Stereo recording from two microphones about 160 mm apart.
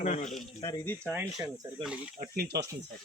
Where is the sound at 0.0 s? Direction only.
45° left (ahead or behind).